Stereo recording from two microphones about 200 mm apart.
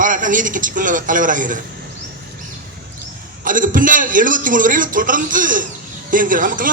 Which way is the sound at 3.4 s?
40° right (ahead or behind).